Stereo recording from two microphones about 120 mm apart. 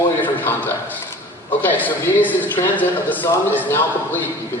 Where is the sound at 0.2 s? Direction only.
15° left (ahead or behind).